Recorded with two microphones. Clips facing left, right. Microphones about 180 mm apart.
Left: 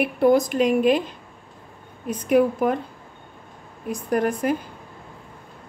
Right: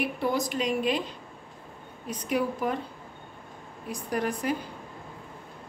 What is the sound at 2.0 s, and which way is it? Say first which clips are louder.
Speech: left 9 dB; 50° left (ahead or behind).